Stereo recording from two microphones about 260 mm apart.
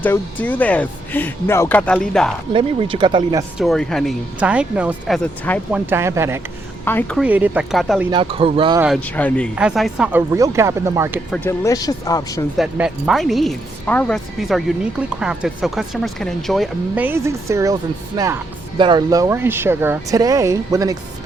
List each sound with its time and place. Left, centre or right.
0.0 s speech: centre
2.5 s speech: right
3.6 s speech: centre
5.8 s speech: centre
6.8 s speech: centre
7.2 s speech: centre
8.1 s speech: right
8.8 s speech: centre
11.3 s speech: centre
12.5 s speech: centre